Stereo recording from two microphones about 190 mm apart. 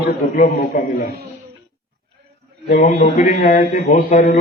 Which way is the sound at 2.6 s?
50° left (ahead or behind).